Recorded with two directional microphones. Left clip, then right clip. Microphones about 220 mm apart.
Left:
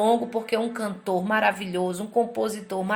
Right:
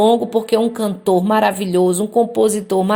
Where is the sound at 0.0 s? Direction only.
30° right (ahead or behind).